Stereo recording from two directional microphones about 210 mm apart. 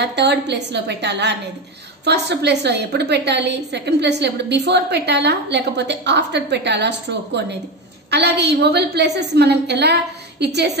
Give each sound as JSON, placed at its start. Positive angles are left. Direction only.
{"t": 0.0, "sound": "a woman's voice", "side_deg": -55}